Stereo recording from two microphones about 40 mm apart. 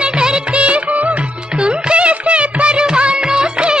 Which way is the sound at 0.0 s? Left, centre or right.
Right.